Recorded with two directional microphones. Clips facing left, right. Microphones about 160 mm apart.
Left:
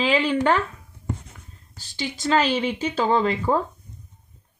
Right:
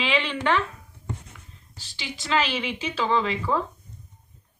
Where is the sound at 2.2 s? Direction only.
45° left (ahead or behind).